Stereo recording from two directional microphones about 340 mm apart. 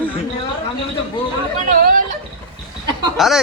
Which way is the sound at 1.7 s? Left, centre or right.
Right.